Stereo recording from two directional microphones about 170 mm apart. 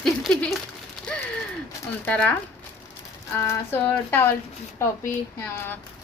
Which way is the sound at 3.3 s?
15° left (ahead or behind).